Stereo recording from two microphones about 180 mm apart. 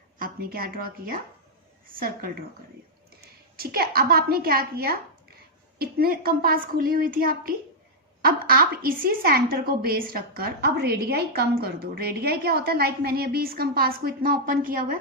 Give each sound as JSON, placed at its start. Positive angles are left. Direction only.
{"t": 0.2, "sound": "a woman's voice", "side_deg": -55}
{"t": 3.6, "sound": "a woman's voice", "side_deg": -55}